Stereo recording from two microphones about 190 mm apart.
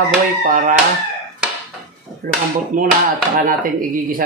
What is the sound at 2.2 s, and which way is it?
Speech, 50° right (ahead or behind).